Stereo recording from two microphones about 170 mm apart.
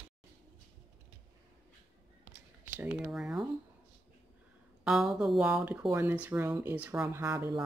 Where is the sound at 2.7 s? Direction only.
10° right (ahead or behind).